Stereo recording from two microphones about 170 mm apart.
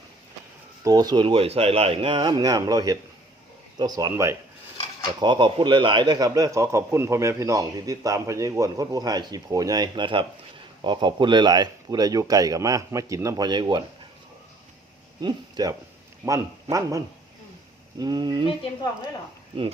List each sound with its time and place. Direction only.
0.9 s a man's voice: 20° right (ahead or behind)
5.2 s a man's voice: 25° right (ahead or behind)
15.2 s a man's voice: 25° right (ahead or behind)
16.7 s speech: 40° right (ahead or behind)
18.0 s a man's voice: 25° right (ahead or behind)
18.4 s speech: 30° left (ahead or behind)